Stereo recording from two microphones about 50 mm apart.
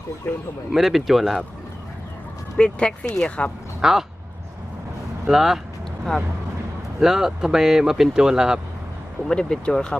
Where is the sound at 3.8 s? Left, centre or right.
Centre.